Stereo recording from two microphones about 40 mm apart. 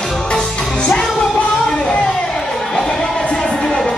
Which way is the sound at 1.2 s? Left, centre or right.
Centre.